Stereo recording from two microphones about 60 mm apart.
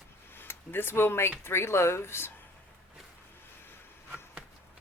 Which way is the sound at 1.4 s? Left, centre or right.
Left.